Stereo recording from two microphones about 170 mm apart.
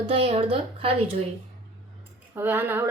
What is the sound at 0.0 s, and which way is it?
Speech, 35° right (ahead or behind).